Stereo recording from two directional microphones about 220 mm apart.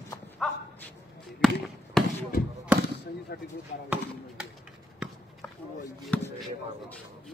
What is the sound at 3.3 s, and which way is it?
Speech, 45° left (ahead or behind).